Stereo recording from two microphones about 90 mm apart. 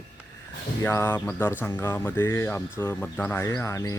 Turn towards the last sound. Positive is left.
turn(degrees=35)  # may be behind; listen again after turning